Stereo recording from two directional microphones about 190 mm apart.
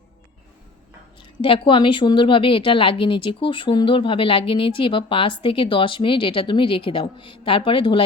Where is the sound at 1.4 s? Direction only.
25° left (ahead or behind).